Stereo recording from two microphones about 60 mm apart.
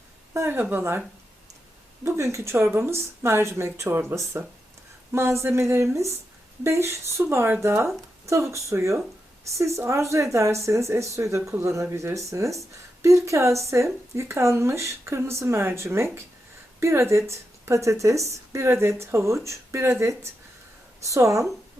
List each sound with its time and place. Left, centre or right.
0.5 s speech: right
2.0 s a woman's voice: right
4.1 s a woman's voice: right
21.0 s speech: right